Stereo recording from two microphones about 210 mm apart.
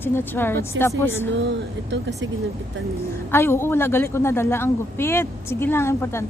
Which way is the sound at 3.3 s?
10° left (ahead or behind).